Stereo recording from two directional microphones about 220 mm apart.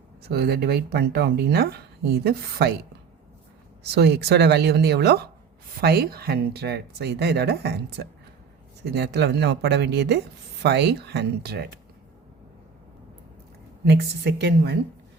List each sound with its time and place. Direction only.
0.2 s speech: 45° right (ahead or behind)
3.9 s speech: 50° right (ahead or behind)
13.8 s speech: 50° right (ahead or behind)